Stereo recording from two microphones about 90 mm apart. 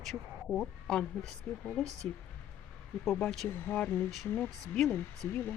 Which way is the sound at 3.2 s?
5° left (ahead or behind).